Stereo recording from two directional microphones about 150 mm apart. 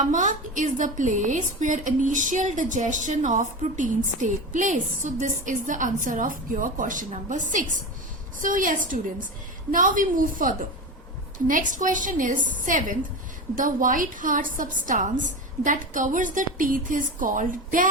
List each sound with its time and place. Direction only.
0.1 s a woman's voice: 60° right (ahead or behind)